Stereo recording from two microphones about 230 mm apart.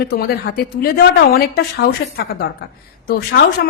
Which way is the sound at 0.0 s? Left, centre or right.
Left.